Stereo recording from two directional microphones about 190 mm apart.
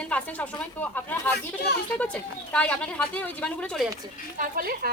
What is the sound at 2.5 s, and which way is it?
Speech, 5° left (ahead or behind).